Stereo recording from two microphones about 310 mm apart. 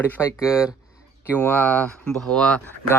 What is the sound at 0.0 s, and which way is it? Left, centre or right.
Speech, centre.